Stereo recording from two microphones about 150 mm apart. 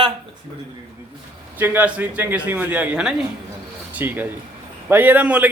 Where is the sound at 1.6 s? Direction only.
10° right (ahead or behind).